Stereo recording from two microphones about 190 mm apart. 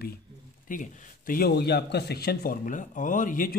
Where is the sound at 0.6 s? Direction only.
45° left (ahead or behind).